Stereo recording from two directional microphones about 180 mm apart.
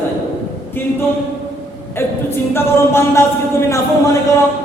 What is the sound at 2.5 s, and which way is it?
Speech, 15° left (ahead or behind).